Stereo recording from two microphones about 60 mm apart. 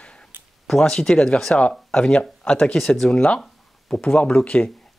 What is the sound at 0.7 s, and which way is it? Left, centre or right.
Speech, centre.